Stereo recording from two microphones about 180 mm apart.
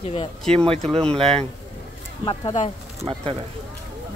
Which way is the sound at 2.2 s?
25° left (ahead or behind).